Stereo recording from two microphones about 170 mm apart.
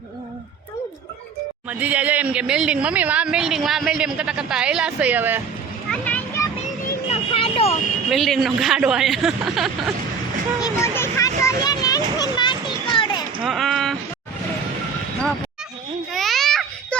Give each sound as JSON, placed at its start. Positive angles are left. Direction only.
{"t": 1.8, "sound": "a woman's voice", "side_deg": -10}
{"t": 5.9, "sound": "children playing", "side_deg": 10}
{"t": 7.1, "sound": "vehicle", "side_deg": 35}
{"t": 8.1, "sound": "speech", "side_deg": 0}
{"t": 10.6, "sound": "speech", "side_deg": 15}
{"t": 11.4, "sound": "children playing", "side_deg": 25}
{"t": 13.4, "sound": "a sound", "side_deg": 0}
{"t": 16.1, "sound": "a sound", "side_deg": 0}